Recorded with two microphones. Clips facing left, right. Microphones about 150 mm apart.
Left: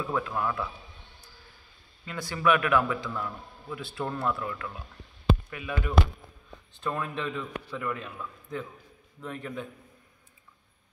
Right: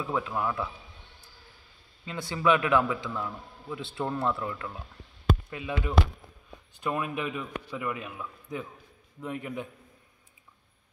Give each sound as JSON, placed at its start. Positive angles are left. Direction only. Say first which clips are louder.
{"t": 0.0, "sound": "a man's voice", "louder": "even", "side_deg": -15}
{"t": 2.0, "sound": "a man's voice", "louder": "even", "side_deg": -25}
{"t": 6.8, "sound": "a man's voice", "louder": "right 1 dB", "side_deg": -10}